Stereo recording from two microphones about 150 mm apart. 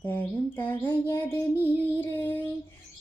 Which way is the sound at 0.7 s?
15° left (ahead or behind).